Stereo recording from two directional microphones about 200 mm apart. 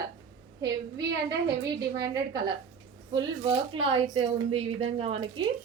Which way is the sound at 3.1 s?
25° right (ahead or behind).